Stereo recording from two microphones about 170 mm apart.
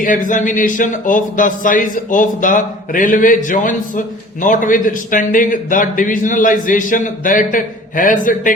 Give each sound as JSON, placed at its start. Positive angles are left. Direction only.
{"t": 0.0, "sound": "speech", "side_deg": 50}